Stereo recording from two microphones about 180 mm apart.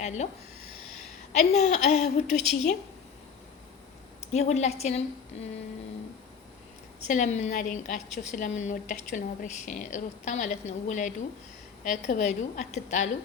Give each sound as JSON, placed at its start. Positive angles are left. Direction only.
{"t": 0.0, "sound": "speech", "side_deg": 40}
{"t": 1.3, "sound": "speech", "side_deg": 40}
{"t": 4.2, "sound": "speech", "side_deg": 35}
{"t": 7.0, "sound": "a woman's voice", "side_deg": 40}